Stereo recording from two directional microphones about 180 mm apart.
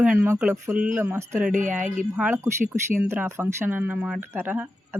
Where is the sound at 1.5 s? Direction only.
45° right (ahead or behind).